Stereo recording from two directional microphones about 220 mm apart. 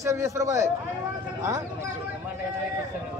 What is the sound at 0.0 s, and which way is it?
Speech, 15° right (ahead or behind).